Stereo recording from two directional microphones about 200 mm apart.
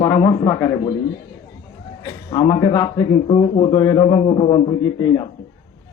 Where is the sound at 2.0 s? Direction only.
15° left (ahead or behind).